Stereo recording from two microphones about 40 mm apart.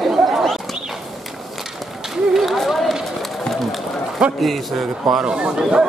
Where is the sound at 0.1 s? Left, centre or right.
Centre.